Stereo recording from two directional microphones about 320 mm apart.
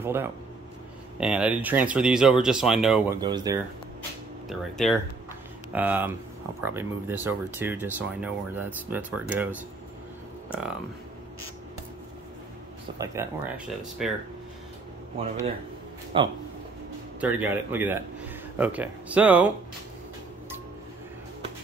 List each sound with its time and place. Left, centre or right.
0.0 s speech: centre
3.2 s speech: centre
4.5 s speech: centre
10.5 s speech: centre
12.9 s speech: centre
15.1 s speech: centre